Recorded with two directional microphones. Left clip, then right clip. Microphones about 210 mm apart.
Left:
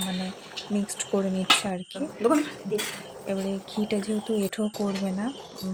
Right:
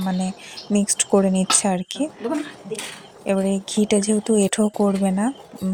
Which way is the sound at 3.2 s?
35° right (ahead or behind).